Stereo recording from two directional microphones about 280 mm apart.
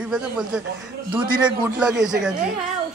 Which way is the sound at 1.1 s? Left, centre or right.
Centre.